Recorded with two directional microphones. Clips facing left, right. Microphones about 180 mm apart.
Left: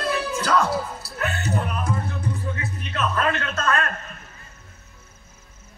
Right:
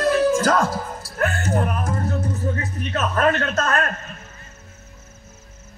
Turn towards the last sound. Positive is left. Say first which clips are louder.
# right 3 dB
turn(degrees=-40)  # may be behind; listen again after turning